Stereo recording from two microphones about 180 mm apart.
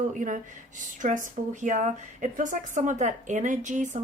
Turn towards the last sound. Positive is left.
turn(degrees=-45)  # may be behind; listen again after turning